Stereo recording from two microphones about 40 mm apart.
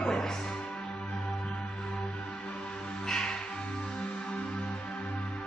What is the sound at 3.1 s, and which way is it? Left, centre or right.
Music, centre.